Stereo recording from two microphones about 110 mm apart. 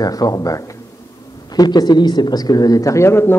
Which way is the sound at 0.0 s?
35° left (ahead or behind).